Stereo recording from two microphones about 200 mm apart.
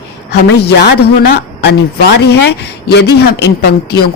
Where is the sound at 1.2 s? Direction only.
55° left (ahead or behind).